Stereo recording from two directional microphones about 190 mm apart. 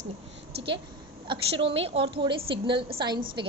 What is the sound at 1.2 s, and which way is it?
A woman's voice, 30° right (ahead or behind).